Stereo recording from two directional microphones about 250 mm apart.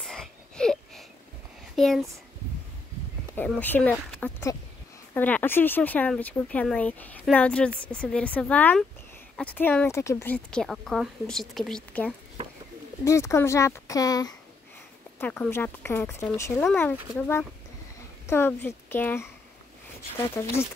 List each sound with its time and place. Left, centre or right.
0.0 s wheeze: centre
1.8 s speech: centre
3.3 s speech: centre
20.4 s speech: centre